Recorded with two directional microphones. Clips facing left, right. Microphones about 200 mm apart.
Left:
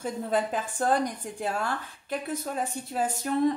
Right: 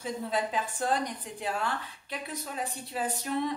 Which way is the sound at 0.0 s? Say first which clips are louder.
Left 4 dB; 50° left (ahead or behind).